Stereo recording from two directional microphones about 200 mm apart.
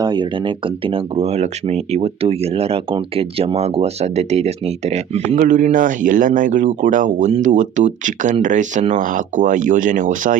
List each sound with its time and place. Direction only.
0.0 s speech: 20° right (ahead or behind); by 10.3 s 40° right (ahead or behind)